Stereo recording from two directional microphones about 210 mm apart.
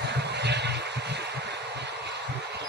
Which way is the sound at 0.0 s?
55° right (ahead or behind).